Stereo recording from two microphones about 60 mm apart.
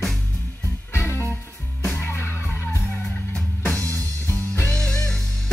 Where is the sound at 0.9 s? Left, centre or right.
Left.